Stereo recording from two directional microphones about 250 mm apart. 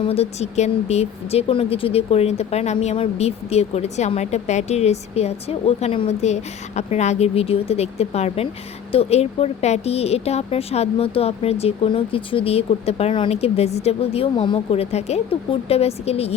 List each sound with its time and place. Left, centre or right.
0.0 s speech: left